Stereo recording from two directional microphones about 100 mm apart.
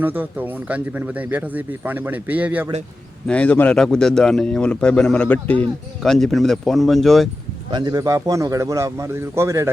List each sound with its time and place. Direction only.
0.0 s speech: 20° right (ahead or behind)
3.2 s speech: 15° left (ahead or behind)
6.0 s speech: 5° left (ahead or behind)
7.7 s speech: 45° right (ahead or behind); by 9.6 s 30° right (ahead or behind)